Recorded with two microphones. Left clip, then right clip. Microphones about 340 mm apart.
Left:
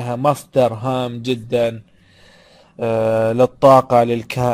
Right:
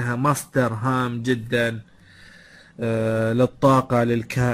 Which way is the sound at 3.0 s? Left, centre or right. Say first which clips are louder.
Left 6 dB; left.